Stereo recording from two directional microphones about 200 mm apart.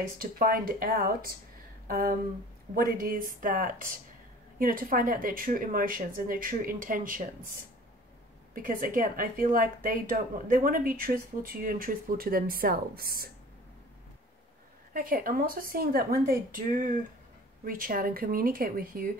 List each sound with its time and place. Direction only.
0.2 s a woman's voice: 45° right (ahead or behind)
8.5 s a woman's voice: 45° right (ahead or behind)
15.0 s a woman's voice: 45° right (ahead or behind)